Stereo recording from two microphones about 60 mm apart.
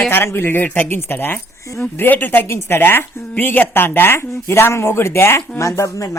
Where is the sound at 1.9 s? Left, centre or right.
Left.